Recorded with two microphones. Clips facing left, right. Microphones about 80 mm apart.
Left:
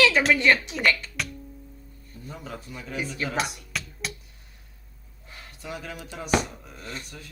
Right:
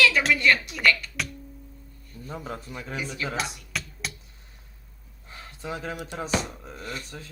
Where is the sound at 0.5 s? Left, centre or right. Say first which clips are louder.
Left 3 dB; centre.